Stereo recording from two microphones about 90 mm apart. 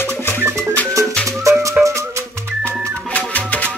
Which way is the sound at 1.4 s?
35° right (ahead or behind).